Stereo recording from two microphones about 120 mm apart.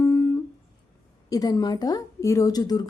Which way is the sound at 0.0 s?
20° left (ahead or behind).